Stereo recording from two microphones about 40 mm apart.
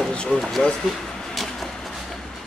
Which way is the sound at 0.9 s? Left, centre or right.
Centre.